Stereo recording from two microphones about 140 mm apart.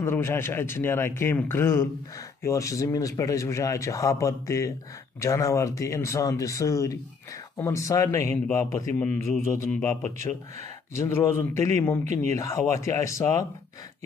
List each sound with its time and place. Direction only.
0.0 s a man's voice: 15° left (ahead or behind)
8.9 s a man's voice: 10° left (ahead or behind)
11.0 s a man's voice: 20° left (ahead or behind)